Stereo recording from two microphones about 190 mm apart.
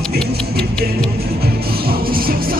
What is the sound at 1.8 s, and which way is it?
Music, 50° right (ahead or behind).